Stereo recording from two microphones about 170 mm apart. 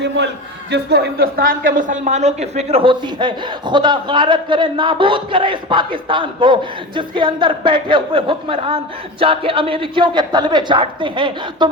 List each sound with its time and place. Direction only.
0.2 s a man's voice: 90° right
0.7 s a woman's voice: 80° right; by 11.7 s 30° right (ahead or behind)